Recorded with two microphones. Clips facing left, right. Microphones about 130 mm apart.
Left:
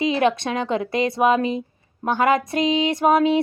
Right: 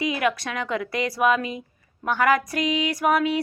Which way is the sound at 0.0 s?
25° left (ahead or behind).